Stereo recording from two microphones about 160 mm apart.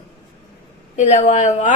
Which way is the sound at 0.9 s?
50° left (ahead or behind).